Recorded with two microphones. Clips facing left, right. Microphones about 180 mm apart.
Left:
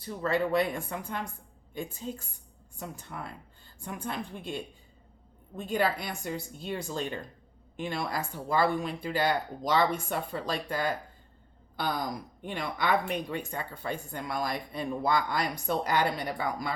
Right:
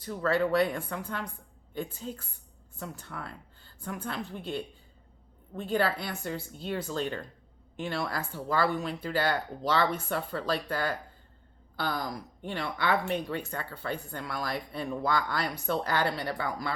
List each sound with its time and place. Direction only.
0.0 s speech: 10° left (ahead or behind)